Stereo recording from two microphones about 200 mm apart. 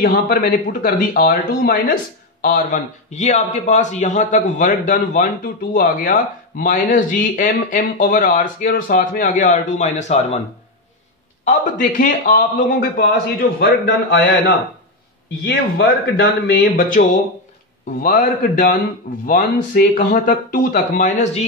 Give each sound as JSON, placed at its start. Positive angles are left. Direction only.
{"t": 0.0, "sound": "a man's voice", "side_deg": 45}
{"t": 11.4, "sound": "a man's voice", "side_deg": 40}
{"t": 18.0, "sound": "a man's voice", "side_deg": 50}